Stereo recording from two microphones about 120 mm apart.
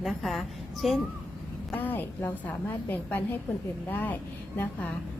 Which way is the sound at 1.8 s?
15° left (ahead or behind).